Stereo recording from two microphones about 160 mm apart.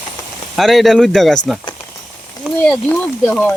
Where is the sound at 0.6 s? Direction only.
Centre (ahead or behind).